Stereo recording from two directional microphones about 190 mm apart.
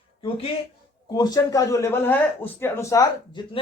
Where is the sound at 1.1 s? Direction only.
20° left (ahead or behind).